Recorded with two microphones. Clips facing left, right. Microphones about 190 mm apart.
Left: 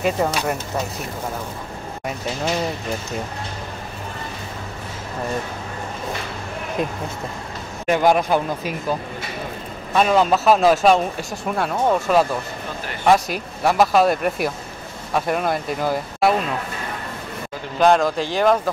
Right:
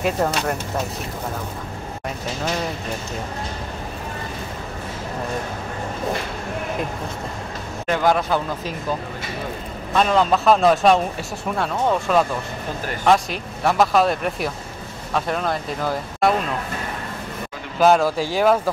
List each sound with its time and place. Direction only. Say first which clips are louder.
0.0 s a man's voice: left 1 dB; 5° left (ahead or behind)
7.8 s speech: left 2 dB; 15° left (ahead or behind)
9.9 s a man's voice: left 1 dB; 5° left (ahead or behind)
17.7 s a man's voice: even; 5° right (ahead or behind)